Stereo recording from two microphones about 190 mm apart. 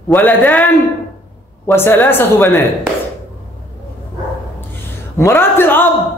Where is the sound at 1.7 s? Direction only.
10° left (ahead or behind).